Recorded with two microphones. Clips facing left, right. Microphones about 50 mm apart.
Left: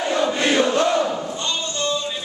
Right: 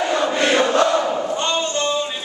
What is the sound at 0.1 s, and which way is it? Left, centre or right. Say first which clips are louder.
Chant: even; right.